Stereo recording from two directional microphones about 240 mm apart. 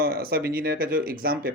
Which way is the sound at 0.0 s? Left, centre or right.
Right.